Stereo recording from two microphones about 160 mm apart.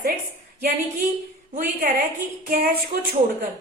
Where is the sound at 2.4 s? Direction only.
65° right (ahead or behind).